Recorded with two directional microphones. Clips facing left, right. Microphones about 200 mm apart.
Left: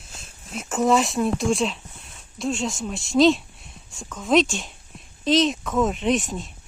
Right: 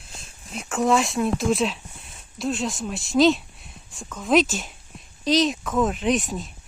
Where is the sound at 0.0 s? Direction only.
Centre (ahead or behind).